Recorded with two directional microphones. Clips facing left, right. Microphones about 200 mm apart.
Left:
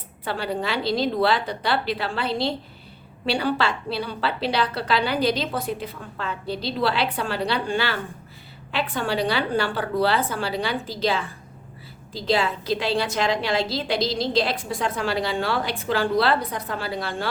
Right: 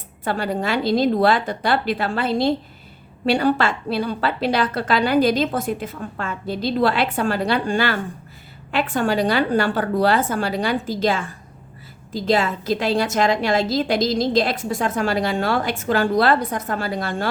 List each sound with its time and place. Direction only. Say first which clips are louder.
0.3 s a woman's voice: right 4 dB; 45° right (ahead or behind)